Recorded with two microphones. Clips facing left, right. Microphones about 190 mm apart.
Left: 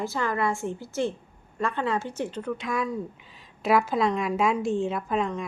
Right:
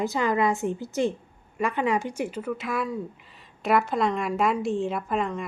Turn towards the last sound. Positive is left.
turn(degrees=0)  # may be behind; listen again after turning